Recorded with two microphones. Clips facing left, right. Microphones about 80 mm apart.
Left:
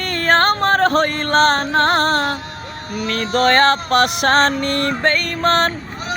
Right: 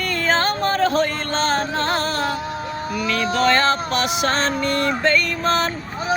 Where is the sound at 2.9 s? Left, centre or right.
Left.